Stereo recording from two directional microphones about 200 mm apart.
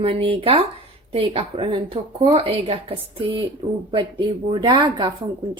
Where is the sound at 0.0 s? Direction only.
25° right (ahead or behind).